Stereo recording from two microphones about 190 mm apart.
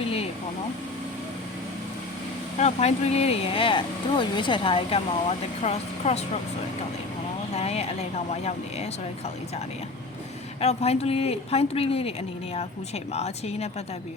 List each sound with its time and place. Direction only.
0.0 s vehicle: 30° left (ahead or behind)
2.6 s speech: 35° left (ahead or behind)
7.5 s speech: 35° left (ahead or behind)
10.6 s speech: 35° left (ahead or behind)